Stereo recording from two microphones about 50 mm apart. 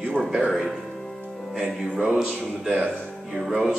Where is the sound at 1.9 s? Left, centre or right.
Centre.